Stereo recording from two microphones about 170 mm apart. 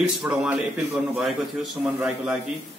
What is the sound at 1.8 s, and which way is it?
Speech, 5° right (ahead or behind).